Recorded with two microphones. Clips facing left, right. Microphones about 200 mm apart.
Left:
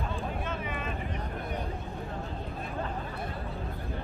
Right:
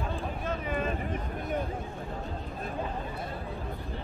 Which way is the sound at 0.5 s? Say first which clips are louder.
Right 4 dB; 40° right (ahead or behind).